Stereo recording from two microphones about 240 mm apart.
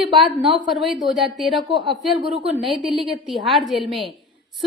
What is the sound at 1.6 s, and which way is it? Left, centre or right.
Speech, centre.